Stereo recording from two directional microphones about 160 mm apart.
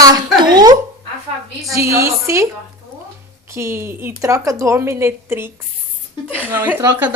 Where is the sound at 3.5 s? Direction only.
15° right (ahead or behind).